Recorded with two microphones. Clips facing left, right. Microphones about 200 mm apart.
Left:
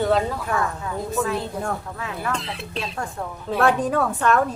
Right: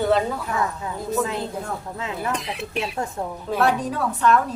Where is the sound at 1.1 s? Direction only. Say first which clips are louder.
Right 1 dB; 20° right (ahead or behind).